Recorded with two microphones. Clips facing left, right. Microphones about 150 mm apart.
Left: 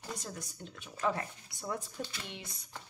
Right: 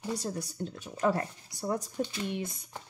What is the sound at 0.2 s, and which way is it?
Speech, 35° right (ahead or behind).